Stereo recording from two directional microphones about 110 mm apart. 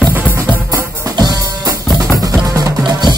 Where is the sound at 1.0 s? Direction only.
35° right (ahead or behind).